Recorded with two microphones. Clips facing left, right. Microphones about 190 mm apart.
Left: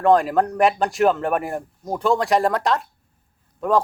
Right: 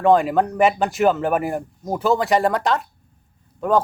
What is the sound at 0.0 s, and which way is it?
Speech, centre (ahead or behind).